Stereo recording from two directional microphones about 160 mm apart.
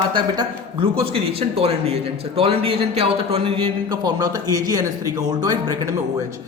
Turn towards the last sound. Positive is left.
turn(degrees=-25)  # may be behind; listen again after turning